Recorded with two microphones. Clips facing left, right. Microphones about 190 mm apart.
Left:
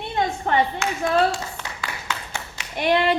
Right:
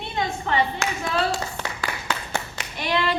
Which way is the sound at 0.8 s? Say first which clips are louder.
Left 2 dB; 40° right (ahead or behind).